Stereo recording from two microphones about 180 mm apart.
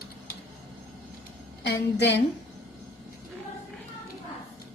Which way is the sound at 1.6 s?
70° left (ahead or behind).